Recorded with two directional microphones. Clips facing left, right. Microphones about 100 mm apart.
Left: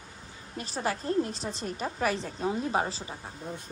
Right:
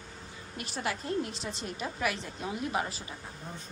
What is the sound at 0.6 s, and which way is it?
A woman's voice, 35° left (ahead or behind).